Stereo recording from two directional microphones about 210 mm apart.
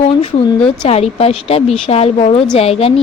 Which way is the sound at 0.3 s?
25° left (ahead or behind).